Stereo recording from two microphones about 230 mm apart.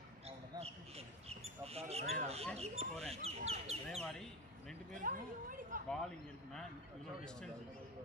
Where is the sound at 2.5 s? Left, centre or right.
Right.